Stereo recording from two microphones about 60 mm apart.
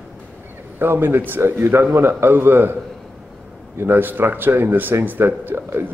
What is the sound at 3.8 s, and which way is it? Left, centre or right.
Speech, right.